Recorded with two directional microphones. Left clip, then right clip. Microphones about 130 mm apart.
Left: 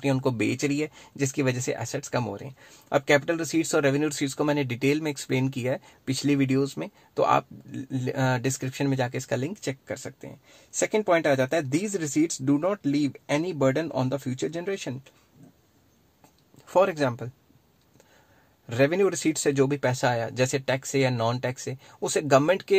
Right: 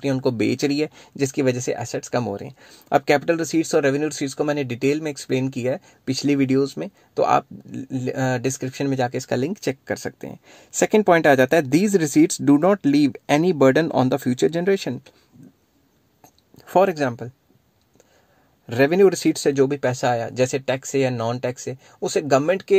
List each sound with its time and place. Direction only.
0.0 s speech: 20° right (ahead or behind); by 15.1 s 45° right (ahead or behind)
16.5 s a sound: 35° right (ahead or behind)
16.9 s speech: 20° right (ahead or behind)
18.7 s speech: 30° right (ahead or behind); by 22.8 s 10° right (ahead or behind)